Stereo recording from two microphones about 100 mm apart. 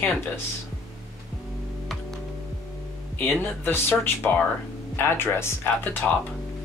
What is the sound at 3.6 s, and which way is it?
Speech, 20° left (ahead or behind).